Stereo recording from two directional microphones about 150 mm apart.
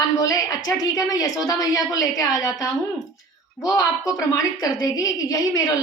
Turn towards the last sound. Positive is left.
turn(degrees=25)  # may be behind; listen again after turning